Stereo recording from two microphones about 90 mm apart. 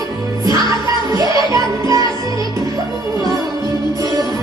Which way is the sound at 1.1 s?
40° right (ahead or behind).